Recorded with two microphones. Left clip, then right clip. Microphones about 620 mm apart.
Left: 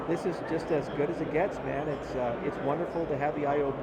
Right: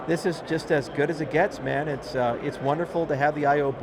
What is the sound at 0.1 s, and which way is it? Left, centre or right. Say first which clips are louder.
Speech: right 6 dB; right.